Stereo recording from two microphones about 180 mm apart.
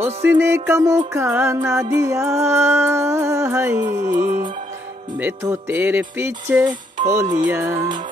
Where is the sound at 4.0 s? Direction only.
45° right (ahead or behind).